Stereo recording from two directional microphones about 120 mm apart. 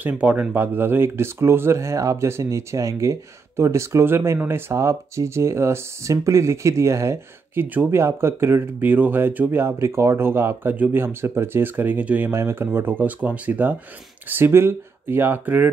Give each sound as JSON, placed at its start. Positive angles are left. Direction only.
{"t": 0.0, "sound": "speech", "side_deg": -10}